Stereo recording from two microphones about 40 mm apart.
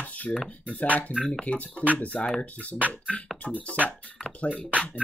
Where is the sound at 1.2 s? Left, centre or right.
Centre.